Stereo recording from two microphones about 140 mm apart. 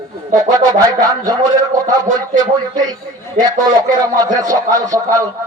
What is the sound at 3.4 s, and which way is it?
A man's voice, 30° right (ahead or behind).